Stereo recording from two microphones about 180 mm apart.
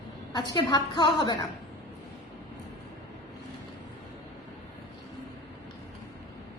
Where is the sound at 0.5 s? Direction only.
25° left (ahead or behind).